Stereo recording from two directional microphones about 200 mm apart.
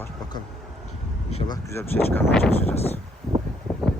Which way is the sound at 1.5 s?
15° left (ahead or behind).